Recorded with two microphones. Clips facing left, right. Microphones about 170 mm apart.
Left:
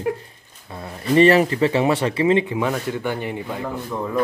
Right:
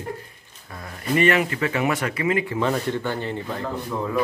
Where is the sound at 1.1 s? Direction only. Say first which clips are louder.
Left 6 dB; 35° left (ahead or behind).